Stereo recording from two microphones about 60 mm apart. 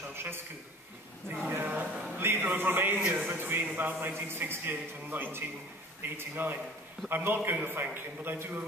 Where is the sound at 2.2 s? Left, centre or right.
Right.